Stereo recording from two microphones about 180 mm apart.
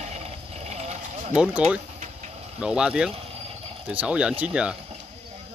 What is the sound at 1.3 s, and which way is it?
Speech, 5° right (ahead or behind).